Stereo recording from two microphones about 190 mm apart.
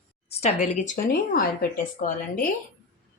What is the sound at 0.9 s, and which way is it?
Speech, 50° left (ahead or behind).